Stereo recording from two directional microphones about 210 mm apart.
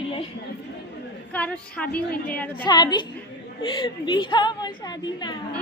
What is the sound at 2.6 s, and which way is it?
A woman's voice, 20° left (ahead or behind).